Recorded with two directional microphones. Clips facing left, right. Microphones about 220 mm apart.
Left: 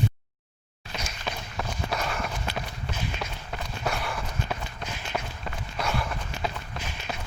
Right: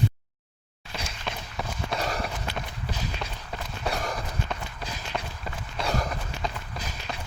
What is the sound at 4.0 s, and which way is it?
Run, 40° right (ahead or behind).